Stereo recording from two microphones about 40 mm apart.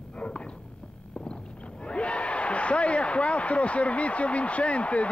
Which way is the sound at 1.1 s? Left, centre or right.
Left.